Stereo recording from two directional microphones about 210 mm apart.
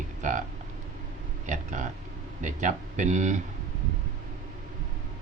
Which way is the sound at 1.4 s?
35° right (ahead or behind).